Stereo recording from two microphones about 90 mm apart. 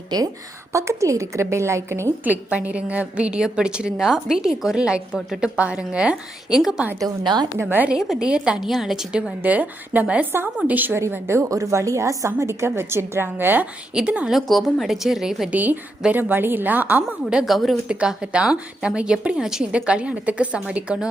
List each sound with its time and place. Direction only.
0.7 s a woman's voice: 35° right (ahead or behind)
2.2 s a woman's voice: 15° right (ahead or behind)
7.6 s a woman's voice: 20° right (ahead or behind)
7.9 s a woman's voice: 5° right (ahead or behind)
9.4 s a woman's voice: 20° right (ahead or behind)
11.0 s a woman's voice: 30° right (ahead or behind); by 14.3 s 10° right (ahead or behind)
14.3 s a woman's voice: centre (ahead or behind)
15.5 s a woman's voice: 20° right (ahead or behind)
17.2 s a woman's voice: 5° right (ahead or behind)